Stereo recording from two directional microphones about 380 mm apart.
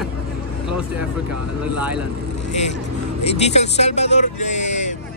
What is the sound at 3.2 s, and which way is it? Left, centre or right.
Speech, centre.